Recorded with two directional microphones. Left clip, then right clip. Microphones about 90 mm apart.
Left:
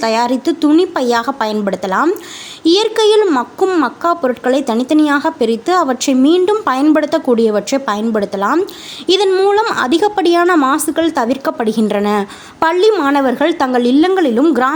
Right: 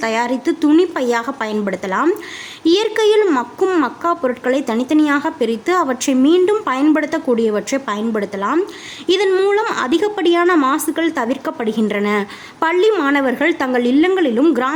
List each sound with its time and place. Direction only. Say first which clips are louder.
0.0 s speech: left 4 dB; 35° left (ahead or behind)
3.2 s speech: left 2 dB; 15° left (ahead or behind)
3.8 s speech: left 3 dB; 30° left (ahead or behind)
10.4 s speech: left 3 dB; 25° left (ahead or behind)
12.9 s speech: left 3 dB; 20° left (ahead or behind)